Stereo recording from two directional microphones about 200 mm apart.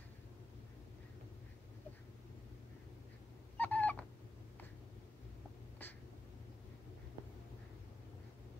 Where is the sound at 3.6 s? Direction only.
10° left (ahead or behind).